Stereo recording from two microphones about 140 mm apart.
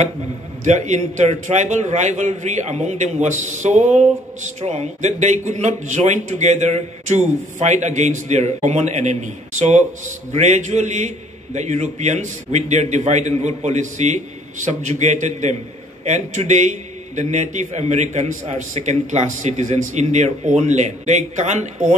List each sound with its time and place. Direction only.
0.7 s a man's voice: 55° right (ahead or behind)